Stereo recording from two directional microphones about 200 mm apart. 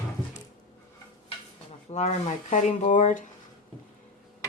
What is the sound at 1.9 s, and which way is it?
Speech, 35° left (ahead or behind).